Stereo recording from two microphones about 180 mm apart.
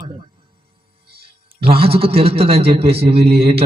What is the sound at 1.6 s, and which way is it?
A man's voice, 30° right (ahead or behind).